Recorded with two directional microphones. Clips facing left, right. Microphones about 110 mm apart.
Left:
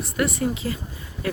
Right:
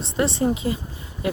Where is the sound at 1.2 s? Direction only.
20° right (ahead or behind).